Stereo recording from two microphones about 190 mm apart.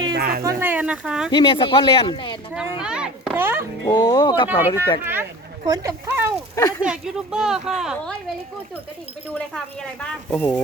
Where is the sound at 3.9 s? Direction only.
20° left (ahead or behind).